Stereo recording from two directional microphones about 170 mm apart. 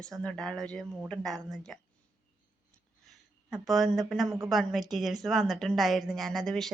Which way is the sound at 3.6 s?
Centre (ahead or behind).